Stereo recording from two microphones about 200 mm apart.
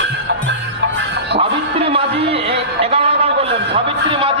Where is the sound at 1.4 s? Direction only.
30° right (ahead or behind).